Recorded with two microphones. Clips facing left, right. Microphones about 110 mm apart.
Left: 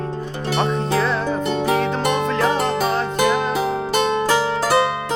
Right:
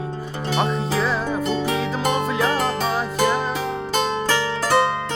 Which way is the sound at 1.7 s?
5° right (ahead or behind).